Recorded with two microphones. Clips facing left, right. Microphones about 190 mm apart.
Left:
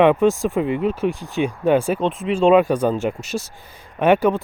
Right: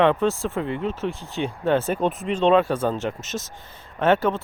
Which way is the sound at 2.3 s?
10° left (ahead or behind).